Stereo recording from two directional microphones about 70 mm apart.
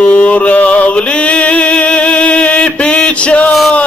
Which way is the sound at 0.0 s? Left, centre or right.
Centre.